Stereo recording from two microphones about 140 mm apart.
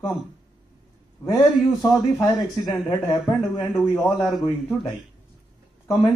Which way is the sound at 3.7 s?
10° left (ahead or behind).